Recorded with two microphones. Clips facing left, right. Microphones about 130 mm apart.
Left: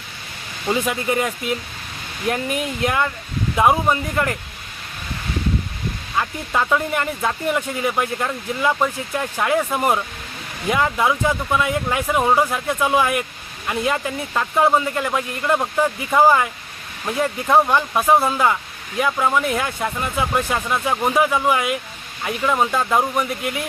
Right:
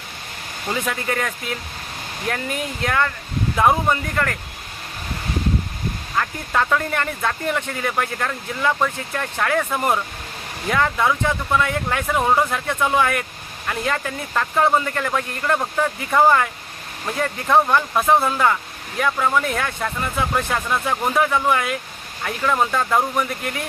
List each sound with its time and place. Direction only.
0.7 s speech: 15° left (ahead or behind)
6.1 s speech: 10° left (ahead or behind)